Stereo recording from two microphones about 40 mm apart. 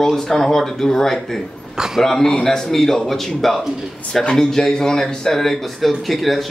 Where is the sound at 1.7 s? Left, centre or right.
Centre.